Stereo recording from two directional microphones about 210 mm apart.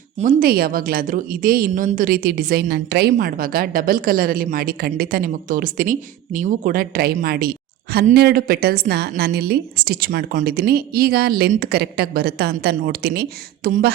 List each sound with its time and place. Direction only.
0.2 s a woman's voice: 40° right (ahead or behind)